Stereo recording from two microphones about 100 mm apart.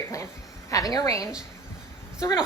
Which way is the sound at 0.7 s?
35° left (ahead or behind).